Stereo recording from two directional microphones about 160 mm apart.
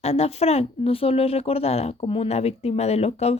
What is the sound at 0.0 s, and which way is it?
Speech, 40° left (ahead or behind).